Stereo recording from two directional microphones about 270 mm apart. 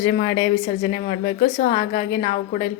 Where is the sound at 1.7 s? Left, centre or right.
Left.